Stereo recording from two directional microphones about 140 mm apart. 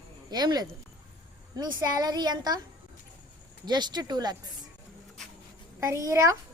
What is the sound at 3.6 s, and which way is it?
Speech, 30° right (ahead or behind).